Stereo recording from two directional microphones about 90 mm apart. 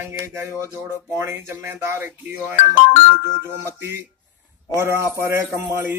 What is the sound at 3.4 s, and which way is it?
Speech, 30° right (ahead or behind).